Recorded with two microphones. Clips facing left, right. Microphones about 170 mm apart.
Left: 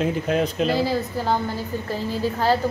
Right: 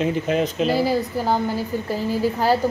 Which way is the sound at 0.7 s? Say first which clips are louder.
Right 2 dB; 15° right (ahead or behind).